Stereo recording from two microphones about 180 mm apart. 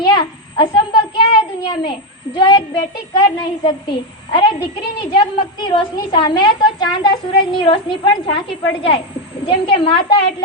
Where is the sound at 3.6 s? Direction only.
25° left (ahead or behind).